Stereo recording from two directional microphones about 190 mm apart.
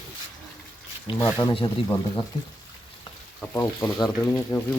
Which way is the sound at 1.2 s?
15° left (ahead or behind).